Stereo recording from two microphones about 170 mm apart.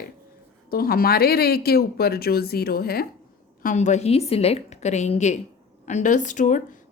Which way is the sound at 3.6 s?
45° left (ahead or behind).